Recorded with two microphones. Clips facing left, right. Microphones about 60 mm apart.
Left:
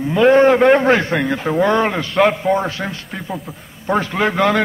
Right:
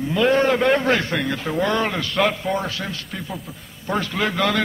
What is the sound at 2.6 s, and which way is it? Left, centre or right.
A man's voice, left.